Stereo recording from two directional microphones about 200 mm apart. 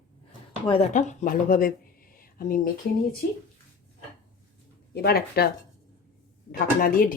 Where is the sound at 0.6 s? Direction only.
25° left (ahead or behind).